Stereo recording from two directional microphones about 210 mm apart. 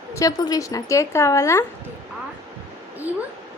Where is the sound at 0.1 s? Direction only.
15° left (ahead or behind).